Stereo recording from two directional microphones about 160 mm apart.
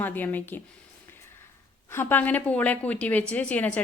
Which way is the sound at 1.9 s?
15° left (ahead or behind).